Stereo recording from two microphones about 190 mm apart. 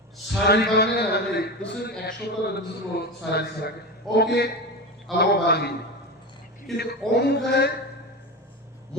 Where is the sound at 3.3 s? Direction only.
60° left (ahead or behind).